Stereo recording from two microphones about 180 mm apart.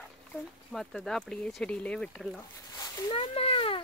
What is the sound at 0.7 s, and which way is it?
Speech, centre (ahead or behind).